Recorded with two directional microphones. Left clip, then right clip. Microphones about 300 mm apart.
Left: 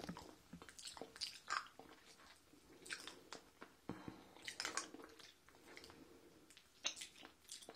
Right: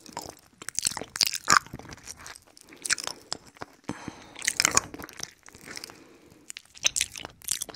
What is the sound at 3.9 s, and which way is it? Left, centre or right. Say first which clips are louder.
Squish: right 13 dB; right.